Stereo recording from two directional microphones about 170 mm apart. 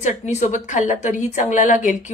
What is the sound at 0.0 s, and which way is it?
Speech, 45° left (ahead or behind).